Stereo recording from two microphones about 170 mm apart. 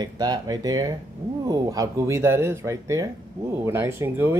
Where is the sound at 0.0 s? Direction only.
25° right (ahead or behind).